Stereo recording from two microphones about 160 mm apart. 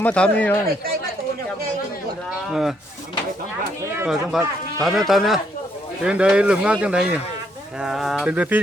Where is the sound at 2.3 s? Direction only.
Centre (ahead or behind).